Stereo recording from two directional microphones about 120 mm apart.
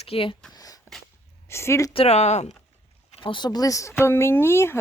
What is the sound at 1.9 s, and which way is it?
Speech, 55° left (ahead or behind).